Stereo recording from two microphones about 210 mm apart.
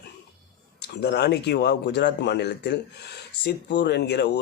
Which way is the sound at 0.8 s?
50° left (ahead or behind).